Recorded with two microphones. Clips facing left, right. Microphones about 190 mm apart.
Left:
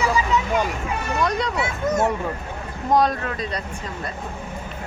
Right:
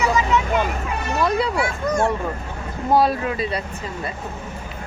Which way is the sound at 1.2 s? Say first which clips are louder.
Right 3 dB; 5° right (ahead or behind).